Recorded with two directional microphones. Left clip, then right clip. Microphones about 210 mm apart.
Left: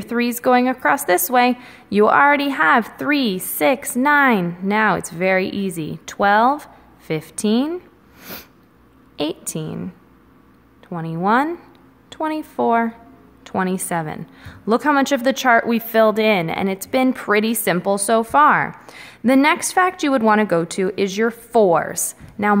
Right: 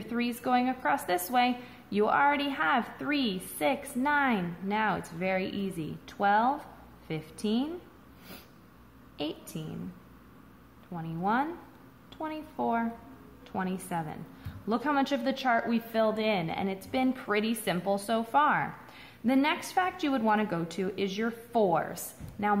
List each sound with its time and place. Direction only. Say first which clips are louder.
0.0 s a woman's voice: left 13 dB; 45° left (ahead or behind)
8.2 s sneeze: left 14 dB; 45° left (ahead or behind)
9.1 s a woman's voice: left 12 dB; 45° left (ahead or behind)
10.9 s a woman's voice: left 12 dB; 50° left (ahead or behind)